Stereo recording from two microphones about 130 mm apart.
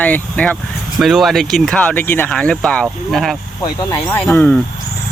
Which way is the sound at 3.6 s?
25° left (ahead or behind).